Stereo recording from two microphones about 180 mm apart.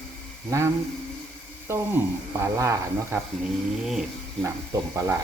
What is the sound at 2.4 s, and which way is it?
Speech, 15° right (ahead or behind).